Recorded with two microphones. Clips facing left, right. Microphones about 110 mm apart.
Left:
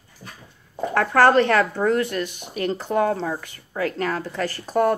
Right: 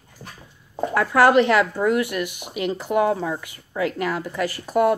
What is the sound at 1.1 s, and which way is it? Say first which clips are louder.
Speech: right 1 dB; 15° right (ahead or behind).